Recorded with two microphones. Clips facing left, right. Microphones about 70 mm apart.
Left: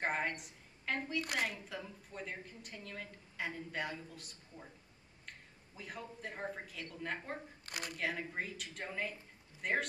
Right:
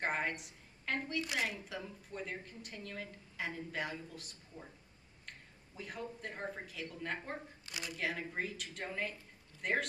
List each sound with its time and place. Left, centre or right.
0.0 s a woman's voice: centre
5.8 s a woman's voice: centre
7.6 s speech: left
8.0 s a woman's voice: centre